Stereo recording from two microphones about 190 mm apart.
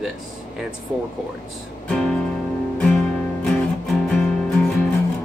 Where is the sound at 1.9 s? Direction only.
5° left (ahead or behind).